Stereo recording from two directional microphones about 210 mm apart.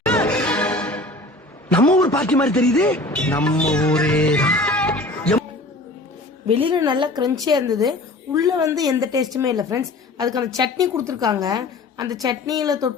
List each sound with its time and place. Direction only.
0.0 s music: 5° left (ahead or behind)
1.7 s a sound: 5° left (ahead or behind)
2.7 s speech: 10° left (ahead or behind)
6.5 s a woman's voice: 25° right (ahead or behind)